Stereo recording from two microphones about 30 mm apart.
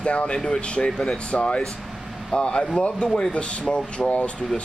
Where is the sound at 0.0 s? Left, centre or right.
Left.